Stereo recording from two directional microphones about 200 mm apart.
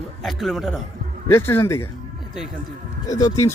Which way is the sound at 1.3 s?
10° left (ahead or behind).